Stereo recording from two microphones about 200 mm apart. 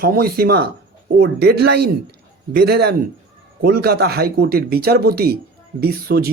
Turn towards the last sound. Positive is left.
turn(degrees=-50)  # may be behind; listen again after turning